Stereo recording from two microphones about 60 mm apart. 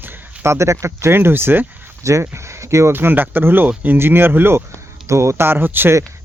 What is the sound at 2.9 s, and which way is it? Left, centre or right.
Speech, right.